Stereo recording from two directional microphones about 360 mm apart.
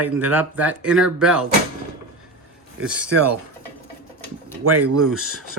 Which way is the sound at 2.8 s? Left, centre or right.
Centre.